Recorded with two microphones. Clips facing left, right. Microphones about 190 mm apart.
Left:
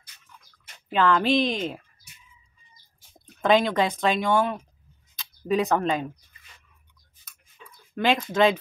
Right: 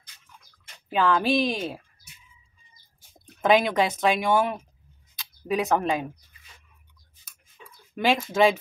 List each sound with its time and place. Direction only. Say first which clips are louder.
0.9 s speech: left 1 dB; 10° right (ahead or behind)
3.3 s speech: even; 10° right (ahead or behind)
5.1 s speech: left 2 dB; 5° right (ahead or behind)
7.9 s speech: even; 10° right (ahead or behind)